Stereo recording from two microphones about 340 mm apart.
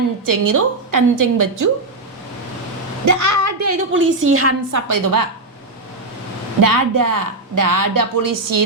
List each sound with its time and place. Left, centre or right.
0.3 s a woman's voice: right
3.1 s a woman's voice: right
4.7 s a woman's voice: right
6.6 s a woman's voice: right